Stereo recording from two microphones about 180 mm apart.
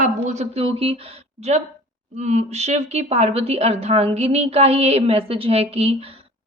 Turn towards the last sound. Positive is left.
turn(degrees=-35)  # may be behind; listen again after turning